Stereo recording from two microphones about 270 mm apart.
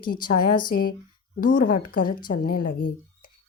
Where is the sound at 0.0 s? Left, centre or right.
Left.